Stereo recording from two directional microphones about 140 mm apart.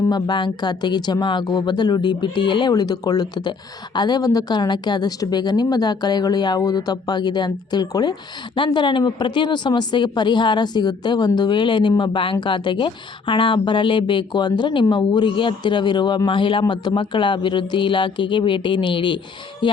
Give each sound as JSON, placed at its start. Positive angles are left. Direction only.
{"t": 0.1, "sound": "speech", "side_deg": 35}